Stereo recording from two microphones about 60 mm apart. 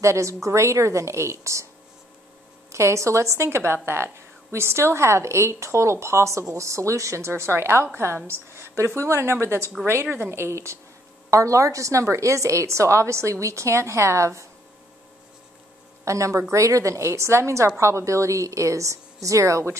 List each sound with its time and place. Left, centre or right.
0.0 s a woman's voice: right
2.7 s a woman's voice: right
16.1 s a woman's voice: right